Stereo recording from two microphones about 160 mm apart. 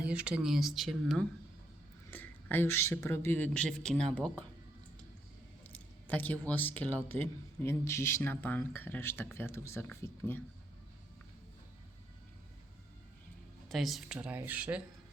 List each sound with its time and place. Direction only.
0.0 s speech: 5° right (ahead or behind)
2.1 s speech: 10° left (ahead or behind)
5.6 s speech: 10° left (ahead or behind)
13.7 s speech: centre (ahead or behind)